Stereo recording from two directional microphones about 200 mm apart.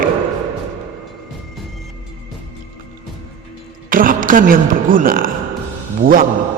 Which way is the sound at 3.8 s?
45° right (ahead or behind).